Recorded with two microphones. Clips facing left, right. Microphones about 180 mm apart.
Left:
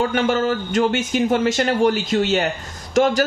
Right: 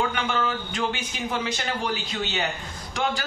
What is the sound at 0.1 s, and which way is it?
A woman's voice, 45° left (ahead or behind).